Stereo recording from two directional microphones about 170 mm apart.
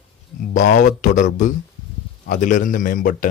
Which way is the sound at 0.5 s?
45° left (ahead or behind).